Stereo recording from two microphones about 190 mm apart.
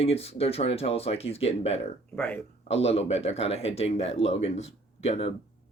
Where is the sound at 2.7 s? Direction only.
35° left (ahead or behind).